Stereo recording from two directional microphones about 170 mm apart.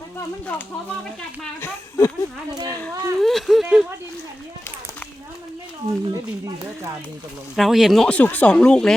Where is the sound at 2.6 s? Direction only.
15° left (ahead or behind).